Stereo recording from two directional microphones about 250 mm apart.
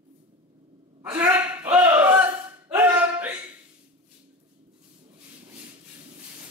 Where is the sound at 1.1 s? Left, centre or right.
Centre.